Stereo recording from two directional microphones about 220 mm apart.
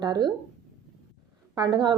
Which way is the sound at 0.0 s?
20° right (ahead or behind).